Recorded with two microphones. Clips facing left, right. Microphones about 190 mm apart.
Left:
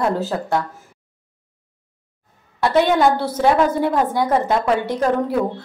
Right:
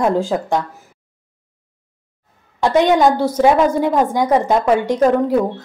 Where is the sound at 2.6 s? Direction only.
20° right (ahead or behind).